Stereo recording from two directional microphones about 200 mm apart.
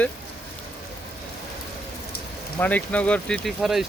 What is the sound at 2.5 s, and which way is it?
Speech, 10° left (ahead or behind).